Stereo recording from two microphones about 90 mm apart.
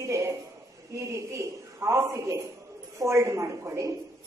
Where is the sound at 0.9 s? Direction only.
35° right (ahead or behind).